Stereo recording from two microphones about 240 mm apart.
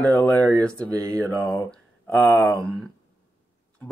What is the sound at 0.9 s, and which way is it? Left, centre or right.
Speech, centre.